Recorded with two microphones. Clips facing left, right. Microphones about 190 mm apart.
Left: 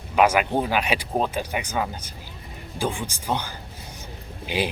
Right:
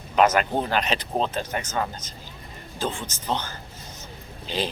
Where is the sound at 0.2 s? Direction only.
10° left (ahead or behind).